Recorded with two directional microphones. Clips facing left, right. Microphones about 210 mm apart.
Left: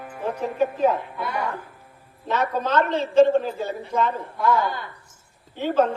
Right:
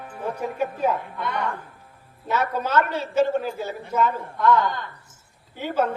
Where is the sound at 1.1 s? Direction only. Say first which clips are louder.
Even; 5° left (ahead or behind).